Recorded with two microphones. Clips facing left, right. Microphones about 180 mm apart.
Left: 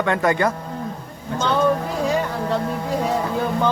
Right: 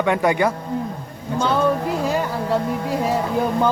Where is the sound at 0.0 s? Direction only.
15° right (ahead or behind).